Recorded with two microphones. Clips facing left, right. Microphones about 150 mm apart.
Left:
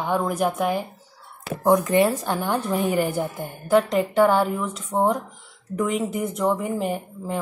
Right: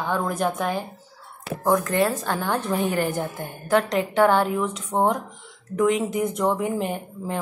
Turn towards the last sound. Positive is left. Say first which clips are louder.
# left 1 dB
turn(degrees=0)  # may be behind; listen again after turning